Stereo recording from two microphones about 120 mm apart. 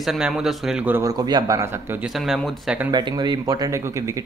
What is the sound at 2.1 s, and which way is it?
Speech, centre (ahead or behind).